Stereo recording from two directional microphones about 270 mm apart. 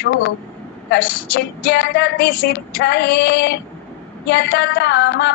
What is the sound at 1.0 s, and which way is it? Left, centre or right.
Speech, left.